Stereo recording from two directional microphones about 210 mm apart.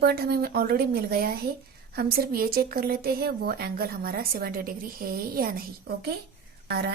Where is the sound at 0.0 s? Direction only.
50° right (ahead or behind).